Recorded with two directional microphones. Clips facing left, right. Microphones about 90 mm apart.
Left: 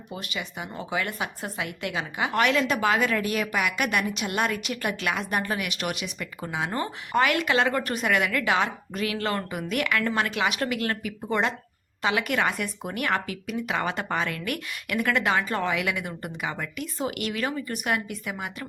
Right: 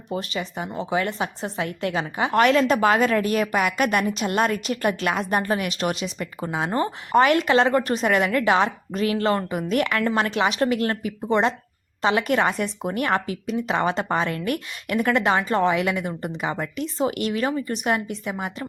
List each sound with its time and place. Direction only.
0.1 s speech: 35° right (ahead or behind)